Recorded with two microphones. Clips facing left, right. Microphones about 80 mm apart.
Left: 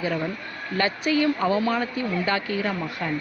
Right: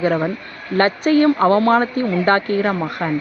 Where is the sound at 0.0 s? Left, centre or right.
Right.